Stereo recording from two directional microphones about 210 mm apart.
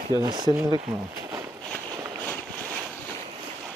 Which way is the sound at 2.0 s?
10° right (ahead or behind).